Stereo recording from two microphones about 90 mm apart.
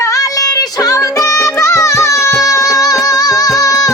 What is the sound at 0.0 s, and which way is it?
Music, 40° left (ahead or behind).